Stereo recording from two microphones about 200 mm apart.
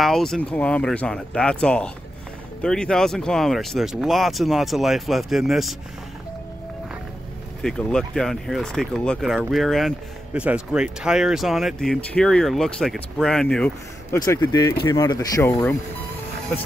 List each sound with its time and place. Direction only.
0.0 s speech: centre (ahead or behind)
7.6 s speech: 5° left (ahead or behind)
14.1 s speech: 15° left (ahead or behind)